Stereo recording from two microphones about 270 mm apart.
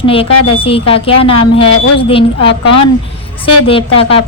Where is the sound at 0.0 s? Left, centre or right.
Left.